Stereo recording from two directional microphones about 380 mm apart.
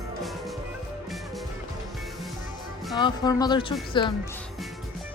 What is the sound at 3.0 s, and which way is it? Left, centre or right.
A woman's voice, centre.